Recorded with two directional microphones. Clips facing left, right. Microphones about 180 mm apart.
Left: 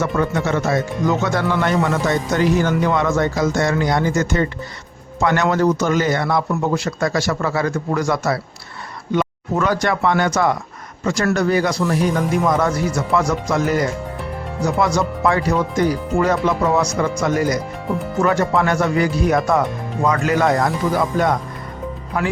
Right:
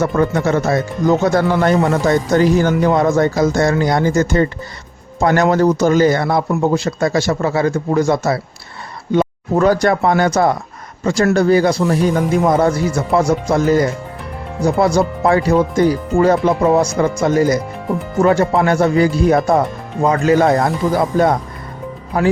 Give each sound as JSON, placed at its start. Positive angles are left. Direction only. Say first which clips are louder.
{"t": 0.0, "sound": "speech", "louder": "right 4 dB", "side_deg": -35}